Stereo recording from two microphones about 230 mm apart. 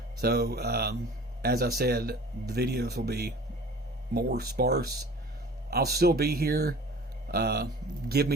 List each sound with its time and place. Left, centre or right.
0.2 s speech: right